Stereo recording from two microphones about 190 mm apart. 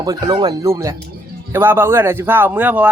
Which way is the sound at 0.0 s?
20° right (ahead or behind).